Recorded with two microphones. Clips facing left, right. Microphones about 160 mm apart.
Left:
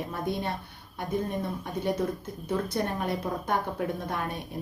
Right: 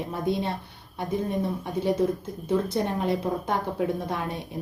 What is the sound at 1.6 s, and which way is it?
A woman's voice, 25° right (ahead or behind).